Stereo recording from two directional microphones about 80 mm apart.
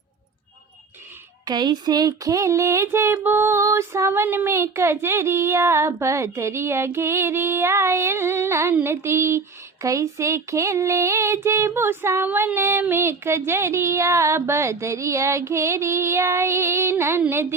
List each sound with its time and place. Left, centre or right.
1.5 s a sound: right
3.2 s female singing: right
3.6 s speech: right
12.3 s female singing: right
12.5 s speech: right